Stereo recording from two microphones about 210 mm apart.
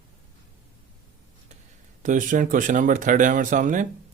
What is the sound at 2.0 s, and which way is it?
Speech, 40° right (ahead or behind).